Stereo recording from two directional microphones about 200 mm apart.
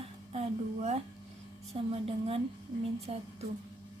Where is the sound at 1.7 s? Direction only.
30° right (ahead or behind).